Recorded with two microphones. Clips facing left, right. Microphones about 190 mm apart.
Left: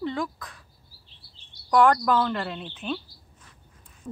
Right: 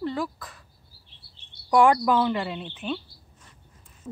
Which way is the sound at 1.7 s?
15° right (ahead or behind).